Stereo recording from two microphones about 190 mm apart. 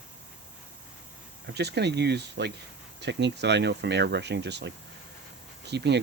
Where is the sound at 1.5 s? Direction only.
60° right (ahead or behind).